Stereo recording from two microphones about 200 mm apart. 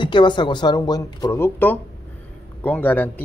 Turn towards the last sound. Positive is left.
turn(degrees=10)  # may be behind; listen again after turning